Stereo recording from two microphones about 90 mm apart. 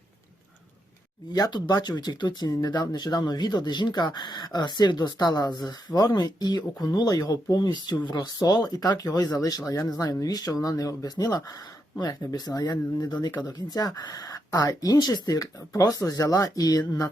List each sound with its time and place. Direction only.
1.3 s speech: 50° left (ahead or behind)